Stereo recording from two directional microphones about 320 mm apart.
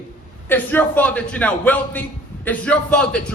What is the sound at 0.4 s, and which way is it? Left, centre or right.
A man's voice, centre.